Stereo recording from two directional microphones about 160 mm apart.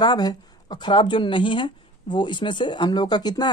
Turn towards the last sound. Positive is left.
turn(degrees=25)  # may be behind; listen again after turning